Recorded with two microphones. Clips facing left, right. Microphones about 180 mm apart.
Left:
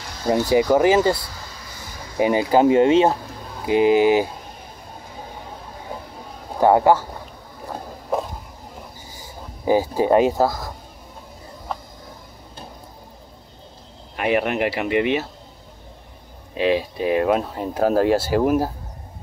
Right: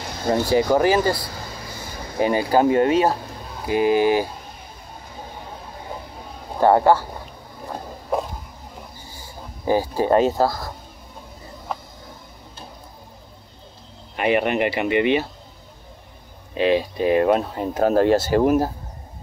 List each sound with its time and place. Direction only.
0.3 s speech: 15° left (ahead or behind)
6.6 s speech: 15° left (ahead or behind)
9.7 s speech: 15° left (ahead or behind)
11.7 s a sound: centre (ahead or behind)
14.1 s speech: centre (ahead or behind)
16.5 s speech: centre (ahead or behind)